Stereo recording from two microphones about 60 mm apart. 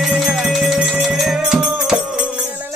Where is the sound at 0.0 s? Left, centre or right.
Centre.